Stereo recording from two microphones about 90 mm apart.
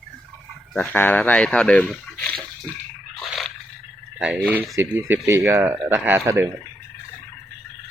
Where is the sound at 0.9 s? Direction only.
20° left (ahead or behind).